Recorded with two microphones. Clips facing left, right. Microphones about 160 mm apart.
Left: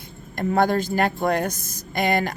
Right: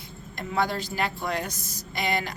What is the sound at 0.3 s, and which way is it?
A woman's voice, 50° left (ahead or behind).